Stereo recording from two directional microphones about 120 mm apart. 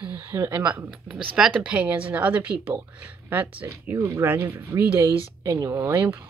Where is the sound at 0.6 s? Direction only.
10° right (ahead or behind).